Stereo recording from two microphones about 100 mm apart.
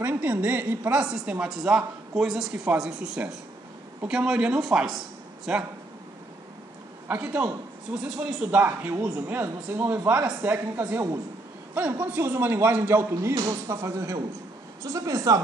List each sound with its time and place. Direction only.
0.0 s a woman's voice: 20° right (ahead or behind)
7.1 s a woman's voice: 15° right (ahead or behind)
13.3 s speech: 45° right (ahead or behind)
13.7 s a woman's voice: 30° right (ahead or behind)